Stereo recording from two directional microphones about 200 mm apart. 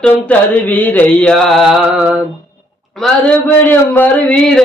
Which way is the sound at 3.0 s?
5° left (ahead or behind).